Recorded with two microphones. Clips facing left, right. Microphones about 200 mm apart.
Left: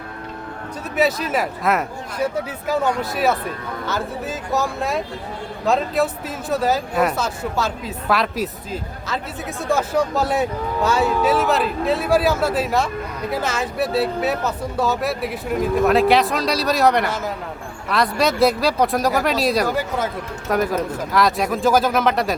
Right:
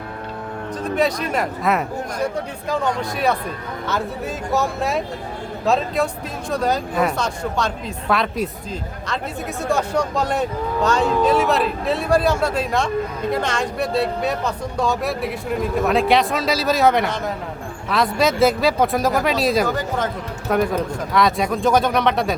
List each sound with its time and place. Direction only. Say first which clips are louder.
1.3 s speech: even; centre (ahead or behind)